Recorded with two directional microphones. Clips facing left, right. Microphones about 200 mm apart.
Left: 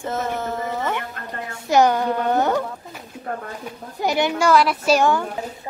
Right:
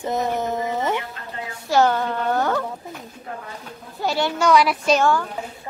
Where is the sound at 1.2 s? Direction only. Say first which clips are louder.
Left 2 dB; 55° left (ahead or behind).